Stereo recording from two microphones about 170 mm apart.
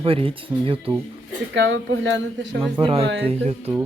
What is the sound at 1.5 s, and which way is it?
Speech, 90° right.